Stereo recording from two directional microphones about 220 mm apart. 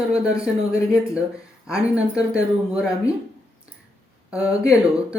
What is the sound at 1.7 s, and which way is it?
Speech, 5° right (ahead or behind).